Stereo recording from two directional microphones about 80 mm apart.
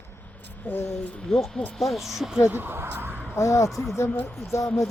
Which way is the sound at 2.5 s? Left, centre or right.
Right.